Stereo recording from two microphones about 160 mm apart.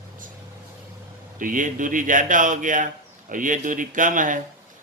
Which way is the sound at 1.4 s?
55° right (ahead or behind).